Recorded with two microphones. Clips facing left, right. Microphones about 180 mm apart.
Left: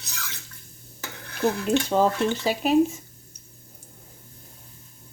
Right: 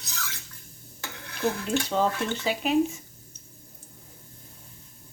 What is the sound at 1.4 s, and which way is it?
Speech, 45° left (ahead or behind).